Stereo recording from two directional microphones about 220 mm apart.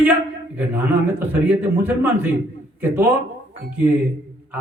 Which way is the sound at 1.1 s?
10° right (ahead or behind).